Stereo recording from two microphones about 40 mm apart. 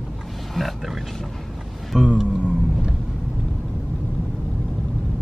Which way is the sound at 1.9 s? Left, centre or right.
Centre.